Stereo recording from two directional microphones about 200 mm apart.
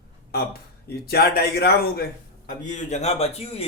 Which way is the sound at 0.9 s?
50° left (ahead or behind).